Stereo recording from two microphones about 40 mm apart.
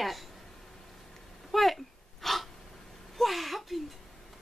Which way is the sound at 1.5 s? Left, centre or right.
Centre.